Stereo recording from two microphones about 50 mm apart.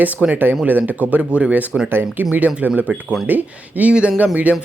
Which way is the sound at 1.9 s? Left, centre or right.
Right.